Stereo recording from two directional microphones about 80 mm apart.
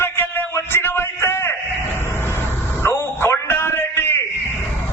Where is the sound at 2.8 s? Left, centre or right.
Left.